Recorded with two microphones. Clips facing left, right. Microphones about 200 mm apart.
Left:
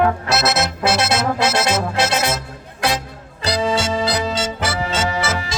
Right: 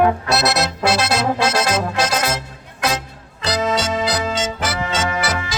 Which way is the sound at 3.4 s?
30° left (ahead or behind).